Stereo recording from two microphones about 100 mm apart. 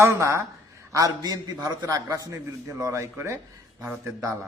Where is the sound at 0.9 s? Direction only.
40° right (ahead or behind).